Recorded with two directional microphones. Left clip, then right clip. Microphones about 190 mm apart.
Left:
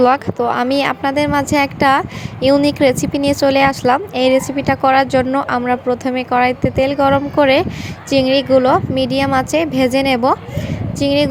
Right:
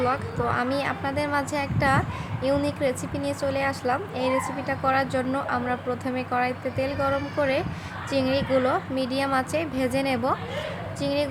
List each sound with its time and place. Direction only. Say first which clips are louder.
0.0 s a woman's voice: left 12 dB; 35° left (ahead or behind)